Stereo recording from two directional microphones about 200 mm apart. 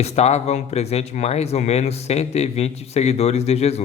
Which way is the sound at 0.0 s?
30° left (ahead or behind).